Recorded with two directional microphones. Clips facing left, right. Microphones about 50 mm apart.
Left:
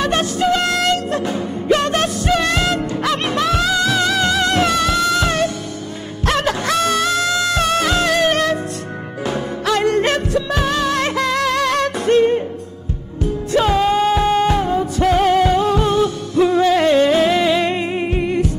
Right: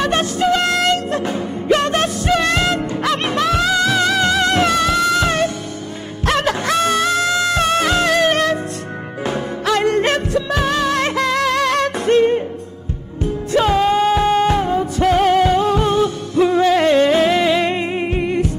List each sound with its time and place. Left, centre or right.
0.0 s music: right
13.5 s music: right
13.8 s music: right
14.7 s music: right